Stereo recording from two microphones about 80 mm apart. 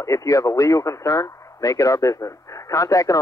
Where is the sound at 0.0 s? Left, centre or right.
Left.